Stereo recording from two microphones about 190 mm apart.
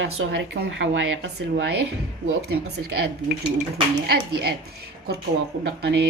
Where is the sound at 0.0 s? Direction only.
80° right.